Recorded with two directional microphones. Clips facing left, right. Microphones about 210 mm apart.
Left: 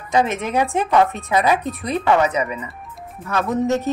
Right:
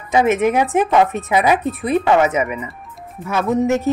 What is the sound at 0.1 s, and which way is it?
A woman's voice, 15° right (ahead or behind).